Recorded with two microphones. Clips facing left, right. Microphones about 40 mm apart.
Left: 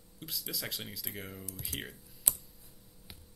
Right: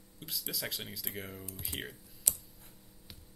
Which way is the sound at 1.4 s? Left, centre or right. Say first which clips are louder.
Even; centre.